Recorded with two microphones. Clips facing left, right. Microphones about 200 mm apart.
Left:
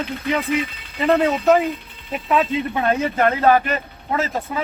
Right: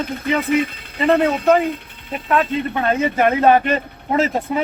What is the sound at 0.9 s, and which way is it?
A man's voice, centre (ahead or behind).